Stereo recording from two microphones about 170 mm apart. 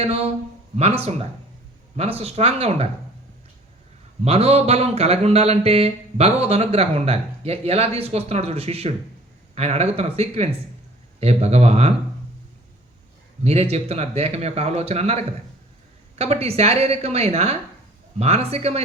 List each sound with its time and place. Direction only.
0.8 s speech: 35° right (ahead or behind)
4.2 s speech: 35° right (ahead or behind)
13.4 s speech: 35° right (ahead or behind)